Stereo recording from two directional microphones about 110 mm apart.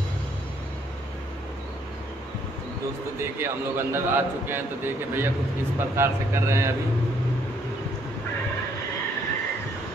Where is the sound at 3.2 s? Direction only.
25° right (ahead or behind).